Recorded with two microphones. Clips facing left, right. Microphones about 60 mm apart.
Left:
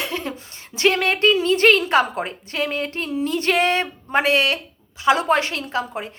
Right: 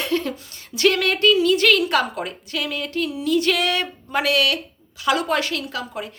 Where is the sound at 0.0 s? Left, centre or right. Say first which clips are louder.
Right 4 dB; centre.